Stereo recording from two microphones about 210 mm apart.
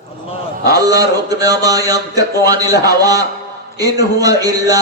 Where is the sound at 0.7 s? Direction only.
15° right (ahead or behind).